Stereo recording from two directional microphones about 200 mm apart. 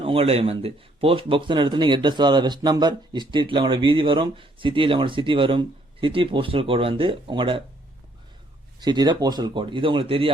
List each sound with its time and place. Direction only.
0.0 s speech: 30° right (ahead or behind)
8.8 s speech: 20° right (ahead or behind)